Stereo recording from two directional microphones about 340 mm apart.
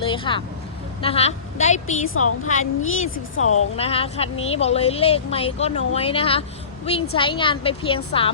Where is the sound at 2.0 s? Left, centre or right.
Left.